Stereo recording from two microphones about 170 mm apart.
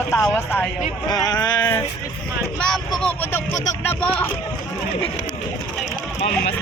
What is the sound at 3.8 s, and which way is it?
Speech, 10° left (ahead or behind).